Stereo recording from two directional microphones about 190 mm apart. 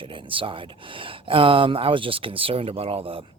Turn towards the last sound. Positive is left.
turn(degrees=-30)  # may be behind; listen again after turning